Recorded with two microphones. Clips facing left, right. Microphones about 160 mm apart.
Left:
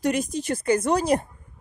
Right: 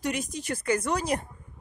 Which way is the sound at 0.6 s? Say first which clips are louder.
Left 6 dB; 25° left (ahead or behind).